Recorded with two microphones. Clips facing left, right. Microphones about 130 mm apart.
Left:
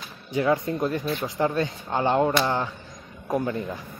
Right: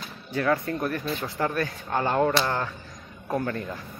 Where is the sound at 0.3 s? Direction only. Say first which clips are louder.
Left 2 dB; 15° left (ahead or behind).